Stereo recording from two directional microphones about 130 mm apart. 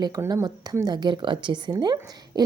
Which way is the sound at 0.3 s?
30° right (ahead or behind).